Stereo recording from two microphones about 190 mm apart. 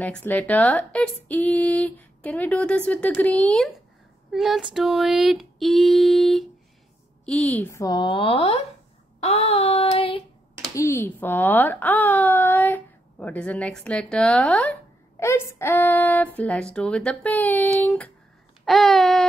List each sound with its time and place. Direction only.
0.0 s speech: 10° left (ahead or behind)
4.3 s female singing: centre (ahead or behind)
7.2 s a woman's voice: 5° left (ahead or behind); by 8.5 s 30° left (ahead or behind)
9.2 s child singing: 35° left (ahead or behind)
10.7 s speech: 15° left (ahead or behind)
18.7 s female singing: centre (ahead or behind)